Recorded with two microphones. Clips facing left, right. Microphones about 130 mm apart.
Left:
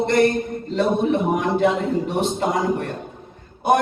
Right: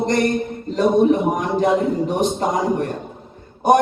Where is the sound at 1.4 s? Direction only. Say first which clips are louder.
Right 1 dB; 40° right (ahead or behind).